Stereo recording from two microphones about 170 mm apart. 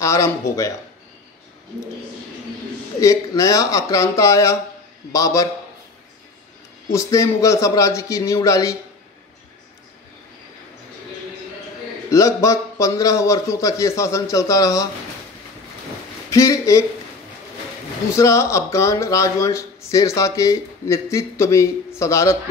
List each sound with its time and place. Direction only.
0.0 s speech: 20° left (ahead or behind)
3.0 s a man's voice: 20° left (ahead or behind)
6.9 s speech: 20° left (ahead or behind)
12.1 s a man's voice: 20° left (ahead or behind)
16.3 s a man's voice: 20° left (ahead or behind)
18.1 s speech: 15° left (ahead or behind)